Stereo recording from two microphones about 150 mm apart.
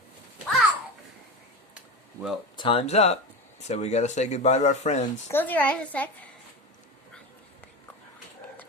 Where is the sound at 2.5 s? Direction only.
35° left (ahead or behind); by 5.1 s 50° left (ahead or behind).